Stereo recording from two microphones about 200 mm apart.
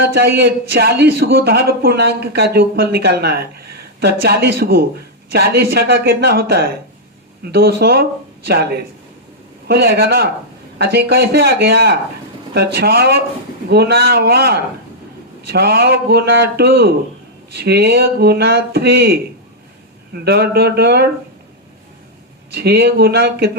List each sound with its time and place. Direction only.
0.0 s a man's voice: 55° right (ahead or behind)
20.2 s a man's voice: 50° right (ahead or behind)
22.5 s a man's voice: 55° right (ahead or behind)